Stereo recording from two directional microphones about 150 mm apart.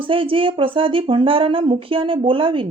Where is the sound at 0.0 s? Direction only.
35° right (ahead or behind).